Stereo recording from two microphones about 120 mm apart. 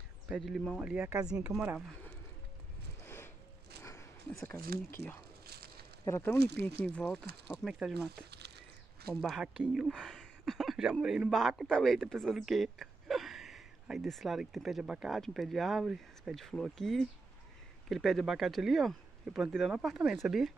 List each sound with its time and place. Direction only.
0.3 s speech: centre (ahead or behind)
0.7 s speech: 10° right (ahead or behind)
3.8 s speech: 25° left (ahead or behind)
7.1 s a man's voice: centre (ahead or behind)